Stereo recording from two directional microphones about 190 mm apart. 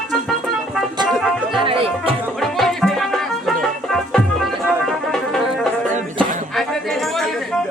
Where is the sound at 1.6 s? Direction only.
30° right (ahead or behind).